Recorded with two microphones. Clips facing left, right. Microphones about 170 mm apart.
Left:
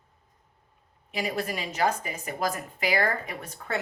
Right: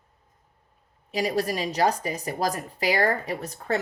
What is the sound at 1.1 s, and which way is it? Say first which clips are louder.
Speech: right 5 dB; 35° right (ahead or behind).